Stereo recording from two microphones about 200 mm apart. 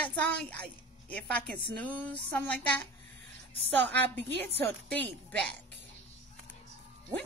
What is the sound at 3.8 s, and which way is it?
Speech, 60° right (ahead or behind).